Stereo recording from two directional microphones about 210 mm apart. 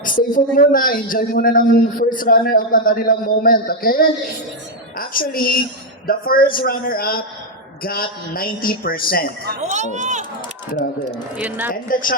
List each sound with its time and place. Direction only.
0.0 s a man's voice: 40° left (ahead or behind)
9.6 s speech: 35° right (ahead or behind)
11.3 s speech: 10° right (ahead or behind)
11.7 s speech: 40° left (ahead or behind)